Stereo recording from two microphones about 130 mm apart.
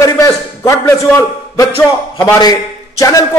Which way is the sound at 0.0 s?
25° left (ahead or behind).